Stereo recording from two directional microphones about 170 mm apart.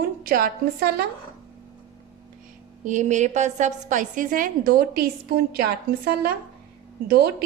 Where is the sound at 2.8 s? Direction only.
45° right (ahead or behind); by 6.1 s 65° right (ahead or behind).